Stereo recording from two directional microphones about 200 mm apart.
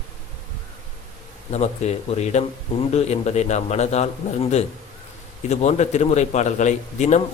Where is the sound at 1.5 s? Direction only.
35° left (ahead or behind).